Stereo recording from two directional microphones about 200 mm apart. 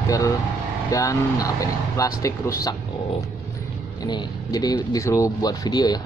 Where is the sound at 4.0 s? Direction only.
20° left (ahead or behind).